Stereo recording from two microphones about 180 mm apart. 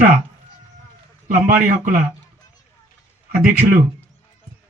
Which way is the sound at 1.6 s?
50° right (ahead or behind).